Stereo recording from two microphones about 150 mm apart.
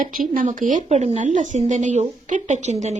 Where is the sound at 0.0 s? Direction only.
65° right (ahead or behind).